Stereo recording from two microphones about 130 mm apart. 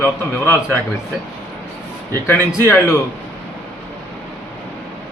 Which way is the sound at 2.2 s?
15° left (ahead or behind).